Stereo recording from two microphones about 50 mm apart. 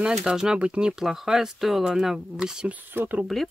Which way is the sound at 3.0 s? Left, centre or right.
Right.